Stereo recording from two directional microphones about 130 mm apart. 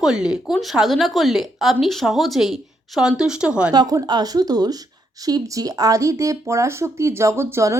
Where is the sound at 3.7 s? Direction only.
30° right (ahead or behind).